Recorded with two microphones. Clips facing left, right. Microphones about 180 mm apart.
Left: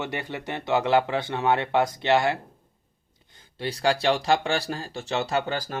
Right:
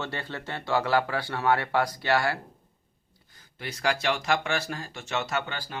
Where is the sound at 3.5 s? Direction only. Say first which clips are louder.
Left 4 dB; 30° left (ahead or behind).